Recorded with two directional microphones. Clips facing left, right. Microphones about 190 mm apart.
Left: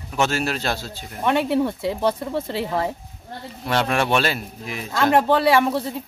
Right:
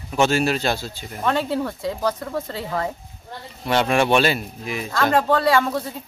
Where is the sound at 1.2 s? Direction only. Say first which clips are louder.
Left 3 dB; 20° left (ahead or behind).